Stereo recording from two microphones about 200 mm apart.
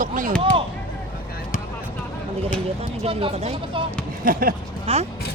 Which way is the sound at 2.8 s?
30° right (ahead or behind).